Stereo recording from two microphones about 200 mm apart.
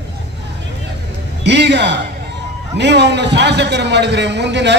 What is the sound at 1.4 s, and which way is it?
A man's voice, 60° right (ahead or behind).